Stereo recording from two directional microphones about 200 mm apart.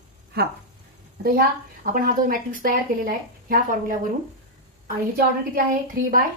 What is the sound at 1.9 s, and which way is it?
Speech, 45° right (ahead or behind).